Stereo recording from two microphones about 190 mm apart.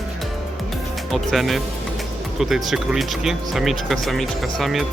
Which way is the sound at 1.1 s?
Centre (ahead or behind).